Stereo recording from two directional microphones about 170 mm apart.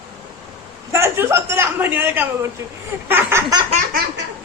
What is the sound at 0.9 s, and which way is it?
A man's voice, 15° right (ahead or behind).